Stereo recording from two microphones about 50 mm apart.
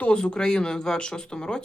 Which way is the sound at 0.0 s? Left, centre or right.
Centre.